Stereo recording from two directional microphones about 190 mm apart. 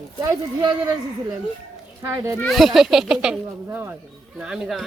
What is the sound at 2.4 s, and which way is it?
Speech, centre (ahead or behind).